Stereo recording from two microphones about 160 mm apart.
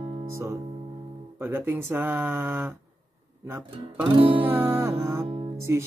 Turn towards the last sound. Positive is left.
turn(degrees=-15)  # may be behind; listen again after turning